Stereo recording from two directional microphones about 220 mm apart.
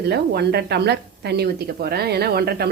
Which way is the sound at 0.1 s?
50° right (ahead or behind).